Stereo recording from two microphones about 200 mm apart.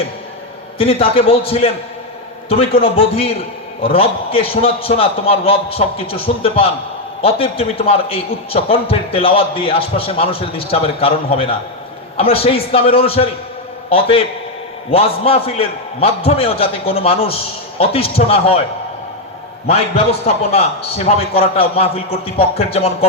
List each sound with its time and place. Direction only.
0.8 s a man's voice: 30° left (ahead or behind)
21.0 s a man's voice: 30° left (ahead or behind)